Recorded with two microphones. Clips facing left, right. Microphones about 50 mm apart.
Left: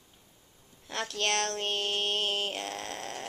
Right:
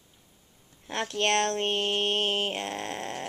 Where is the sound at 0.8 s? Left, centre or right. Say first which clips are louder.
Right 4 dB; right.